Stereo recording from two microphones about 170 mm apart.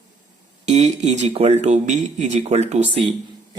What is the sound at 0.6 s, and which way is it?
Speech, 40° right (ahead or behind).